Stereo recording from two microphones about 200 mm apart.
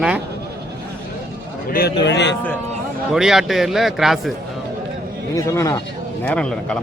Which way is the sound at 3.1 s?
Centre (ahead or behind).